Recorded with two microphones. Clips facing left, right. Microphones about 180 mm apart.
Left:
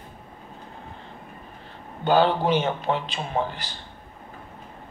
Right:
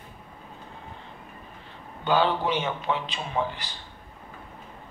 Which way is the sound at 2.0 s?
45° left (ahead or behind).